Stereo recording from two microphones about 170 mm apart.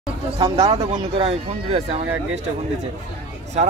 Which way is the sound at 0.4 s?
25° right (ahead or behind).